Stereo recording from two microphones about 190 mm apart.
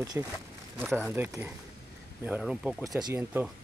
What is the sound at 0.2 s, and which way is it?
Speech, 10° right (ahead or behind).